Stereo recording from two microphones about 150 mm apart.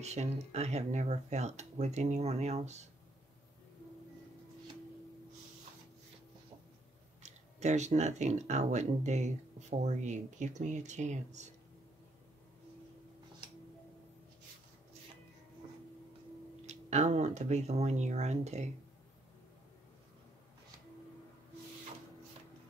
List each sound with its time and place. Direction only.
0.0 s speech: 45° right (ahead or behind)
7.2 s speech: 50° right (ahead or behind)
16.6 s speech: 50° right (ahead or behind)